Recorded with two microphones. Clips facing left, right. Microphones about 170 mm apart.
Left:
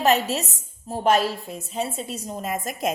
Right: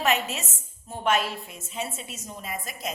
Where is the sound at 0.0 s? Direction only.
35° left (ahead or behind).